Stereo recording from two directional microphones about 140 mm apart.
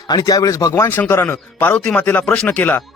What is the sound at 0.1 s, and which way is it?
Speech, 25° left (ahead or behind).